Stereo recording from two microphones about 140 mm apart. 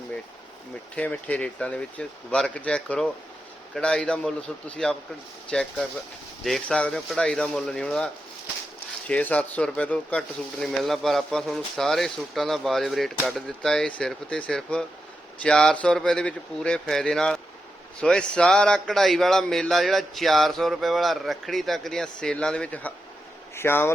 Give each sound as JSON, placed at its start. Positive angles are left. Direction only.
{"t": 0.9, "sound": "speech", "side_deg": 10}